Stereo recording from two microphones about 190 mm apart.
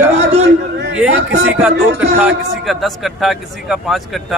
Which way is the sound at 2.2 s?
Centre (ahead or behind).